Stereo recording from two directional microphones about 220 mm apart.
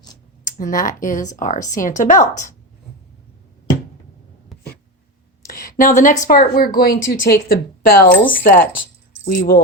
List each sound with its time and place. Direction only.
0.4 s speech: 40° left (ahead or behind)
5.5 s speech: 40° left (ahead or behind)